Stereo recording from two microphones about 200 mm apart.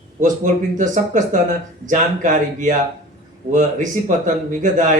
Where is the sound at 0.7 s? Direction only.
40° right (ahead or behind).